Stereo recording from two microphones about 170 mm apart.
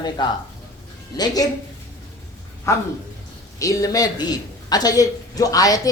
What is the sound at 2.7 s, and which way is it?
A woman's voice, 15° left (ahead or behind).